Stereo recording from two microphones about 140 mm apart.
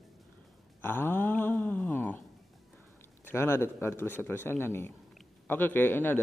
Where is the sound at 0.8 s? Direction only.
15° left (ahead or behind).